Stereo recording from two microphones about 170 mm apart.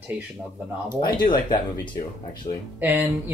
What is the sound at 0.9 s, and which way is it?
Speech, 25° left (ahead or behind).